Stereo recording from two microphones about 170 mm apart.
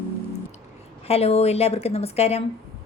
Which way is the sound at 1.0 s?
35° left (ahead or behind).